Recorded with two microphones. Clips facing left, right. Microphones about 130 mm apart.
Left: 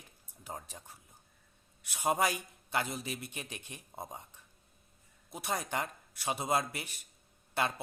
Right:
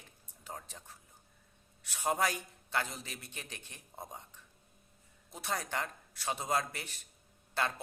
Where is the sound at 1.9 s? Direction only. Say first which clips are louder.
Left 2 dB; 15° left (ahead or behind).